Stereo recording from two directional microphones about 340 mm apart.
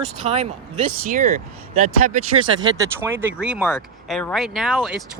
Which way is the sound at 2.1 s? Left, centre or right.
Right.